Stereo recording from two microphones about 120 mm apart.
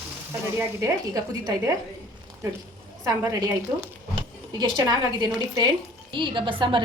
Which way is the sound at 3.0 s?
25° right (ahead or behind).